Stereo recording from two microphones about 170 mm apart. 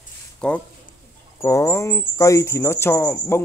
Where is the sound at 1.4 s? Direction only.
15° left (ahead or behind).